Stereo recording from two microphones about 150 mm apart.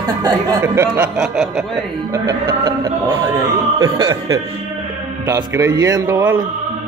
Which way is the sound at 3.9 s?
25° right (ahead or behind).